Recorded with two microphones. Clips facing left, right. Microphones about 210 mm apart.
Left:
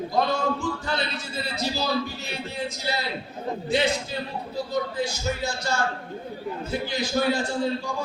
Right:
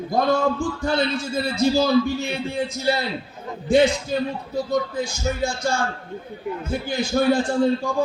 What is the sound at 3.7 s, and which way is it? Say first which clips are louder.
A man's voice: right 8 dB; 50° right (ahead or behind).